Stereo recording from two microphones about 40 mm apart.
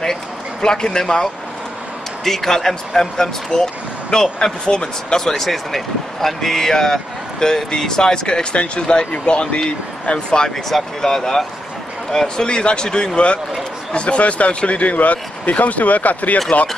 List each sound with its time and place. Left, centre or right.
0.0 s a sound: centre
2.2 s speech: centre
5.2 s speech: centre; by 10.5 s left
10.7 s speech: centre; by 16.3 s left